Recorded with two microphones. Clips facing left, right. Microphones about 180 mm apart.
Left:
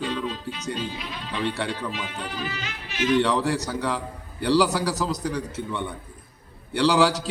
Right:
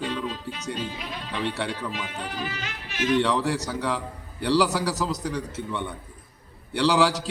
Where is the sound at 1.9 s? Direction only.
45° right (ahead or behind).